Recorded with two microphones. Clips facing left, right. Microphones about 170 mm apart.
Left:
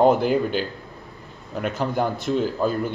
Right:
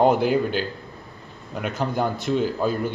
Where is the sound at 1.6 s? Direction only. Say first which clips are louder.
Left 1 dB; centre (ahead or behind).